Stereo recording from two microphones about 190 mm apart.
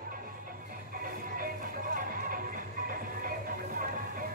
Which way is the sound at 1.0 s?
45° right (ahead or behind).